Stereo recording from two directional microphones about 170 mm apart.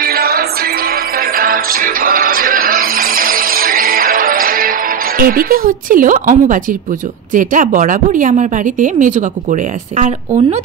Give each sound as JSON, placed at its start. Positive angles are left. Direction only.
{"t": 0.0, "sound": "music", "side_deg": -60}
{"t": 7.3, "sound": "a woman's voice", "side_deg": -50}